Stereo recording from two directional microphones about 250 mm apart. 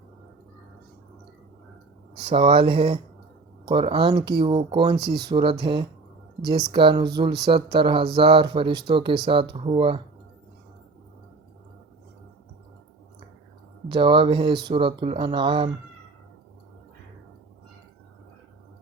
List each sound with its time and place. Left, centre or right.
2.2 s speech: right
4.9 s speech: right
5.3 s speech: centre
13.8 s speech: centre